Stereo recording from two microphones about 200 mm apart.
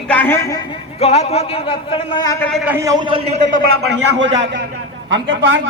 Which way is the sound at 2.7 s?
15° right (ahead or behind).